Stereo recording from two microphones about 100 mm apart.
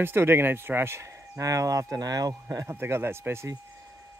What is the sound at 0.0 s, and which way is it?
Speech, 25° right (ahead or behind).